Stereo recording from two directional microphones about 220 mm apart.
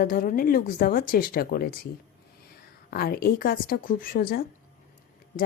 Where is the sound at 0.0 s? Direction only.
40° left (ahead or behind).